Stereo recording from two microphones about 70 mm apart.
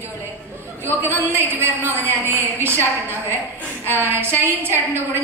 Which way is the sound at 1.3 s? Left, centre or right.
Right.